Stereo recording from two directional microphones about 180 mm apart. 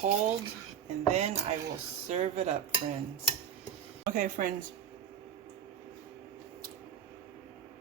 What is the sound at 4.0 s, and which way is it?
Speech, 45° right (ahead or behind).